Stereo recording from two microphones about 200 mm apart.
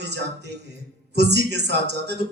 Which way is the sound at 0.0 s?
60° right (ahead or behind).